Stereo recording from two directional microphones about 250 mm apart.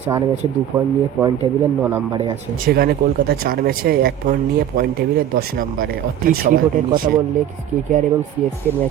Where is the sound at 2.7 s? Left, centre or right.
Right.